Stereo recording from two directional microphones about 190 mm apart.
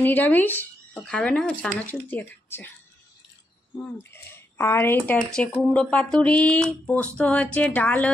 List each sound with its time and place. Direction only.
0.0 s speech: 10° left (ahead or behind)
3.7 s speech: 10° left (ahead or behind)